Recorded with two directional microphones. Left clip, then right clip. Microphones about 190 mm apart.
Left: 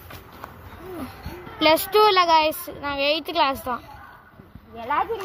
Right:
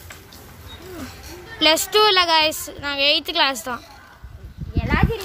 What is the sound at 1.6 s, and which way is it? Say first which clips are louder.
A woman's voice: right 1 dB; centre (ahead or behind).